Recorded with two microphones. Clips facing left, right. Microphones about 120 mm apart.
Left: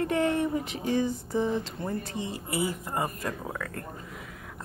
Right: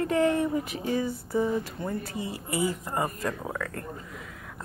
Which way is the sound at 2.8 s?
25° right (ahead or behind).